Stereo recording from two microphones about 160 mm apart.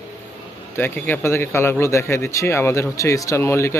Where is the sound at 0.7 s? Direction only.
10° left (ahead or behind).